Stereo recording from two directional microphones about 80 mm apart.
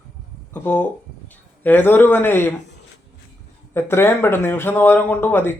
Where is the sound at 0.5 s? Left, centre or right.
Left.